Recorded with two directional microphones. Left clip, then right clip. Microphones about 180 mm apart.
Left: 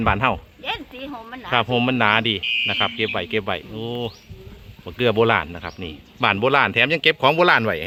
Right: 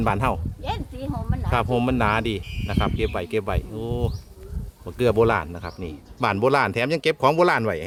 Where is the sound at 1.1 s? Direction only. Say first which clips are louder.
Right 1 dB; 35° right (ahead or behind).